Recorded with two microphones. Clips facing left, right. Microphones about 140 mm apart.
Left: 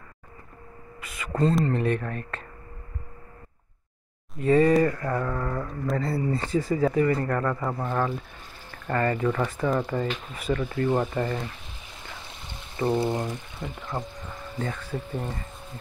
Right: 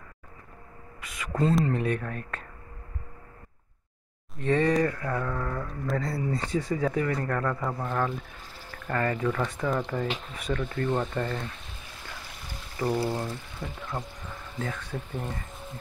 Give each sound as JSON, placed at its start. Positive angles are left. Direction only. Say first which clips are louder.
{"t": 1.0, "sound": "speech", "louder": "left 2 dB", "side_deg": 0}
{"t": 4.4, "sound": "speech", "louder": "left 4 dB", "side_deg": 5}
{"t": 12.1, "sound": "a sound", "louder": "left 1 dB", "side_deg": 25}
{"t": 12.8, "sound": "speech", "louder": "left 3 dB", "side_deg": 20}
{"t": 14.6, "sound": "speech", "louder": "left 2 dB", "side_deg": 5}